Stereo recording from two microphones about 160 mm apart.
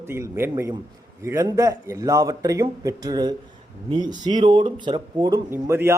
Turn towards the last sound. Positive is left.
turn(degrees=-15)  # may be behind; listen again after turning